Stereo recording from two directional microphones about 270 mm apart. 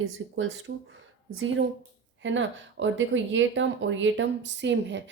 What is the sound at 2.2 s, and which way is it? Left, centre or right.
Speech, right.